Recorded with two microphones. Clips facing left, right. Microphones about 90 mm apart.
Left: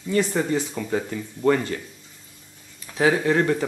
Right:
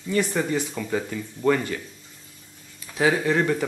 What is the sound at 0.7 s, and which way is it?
Speech, 10° left (ahead or behind).